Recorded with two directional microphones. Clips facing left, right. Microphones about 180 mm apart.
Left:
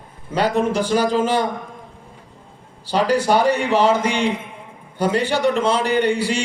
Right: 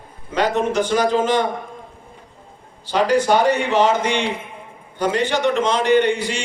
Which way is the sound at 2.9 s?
35° left (ahead or behind).